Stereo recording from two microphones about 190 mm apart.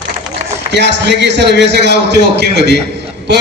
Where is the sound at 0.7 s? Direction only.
65° right (ahead or behind).